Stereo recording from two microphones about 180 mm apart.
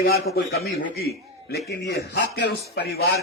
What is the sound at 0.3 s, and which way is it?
A man's voice, 60° left (ahead or behind).